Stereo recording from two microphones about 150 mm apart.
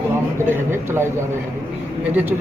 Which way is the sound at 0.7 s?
15° right (ahead or behind).